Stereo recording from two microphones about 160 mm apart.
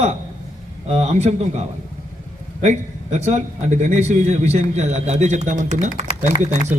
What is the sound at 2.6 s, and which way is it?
A man's voice, 45° right (ahead or behind).